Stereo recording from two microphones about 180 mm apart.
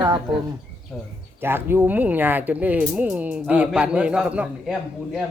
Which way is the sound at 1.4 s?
10° right (ahead or behind).